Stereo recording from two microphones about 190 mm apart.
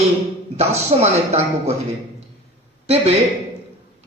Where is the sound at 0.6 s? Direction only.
35° right (ahead or behind).